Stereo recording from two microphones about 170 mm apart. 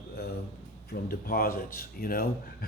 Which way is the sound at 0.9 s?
60° left (ahead or behind).